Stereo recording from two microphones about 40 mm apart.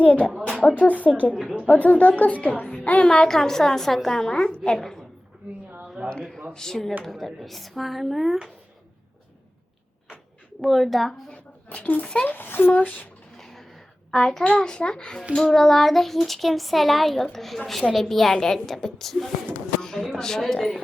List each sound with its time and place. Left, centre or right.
0.0 s a child's voice: left
3.1 s a woman's voice: centre
4.8 s a woman's voice: centre
6.0 s speech: right
6.5 s a woman's voice: centre
10.6 s a child's voice: centre
11.1 s a sound: left
12.2 s speech: left
12.7 s speech: left
13.3 s a sound: centre
14.4 s a child's voice: left
15.4 s a child's voice: centre